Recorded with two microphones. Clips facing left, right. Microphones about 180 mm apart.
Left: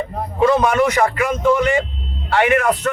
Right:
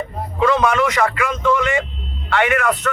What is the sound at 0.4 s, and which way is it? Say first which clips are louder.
A man's voice: left 2 dB; 40° left (ahead or behind).